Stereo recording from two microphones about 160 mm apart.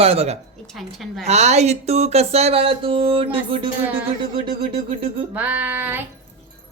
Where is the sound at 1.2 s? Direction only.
45° right (ahead or behind).